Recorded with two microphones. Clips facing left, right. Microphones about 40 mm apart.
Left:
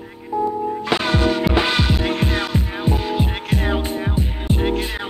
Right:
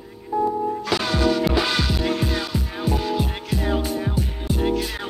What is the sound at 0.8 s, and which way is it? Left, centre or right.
Music, left.